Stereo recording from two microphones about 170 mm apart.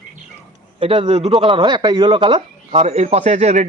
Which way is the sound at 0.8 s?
30° right (ahead or behind).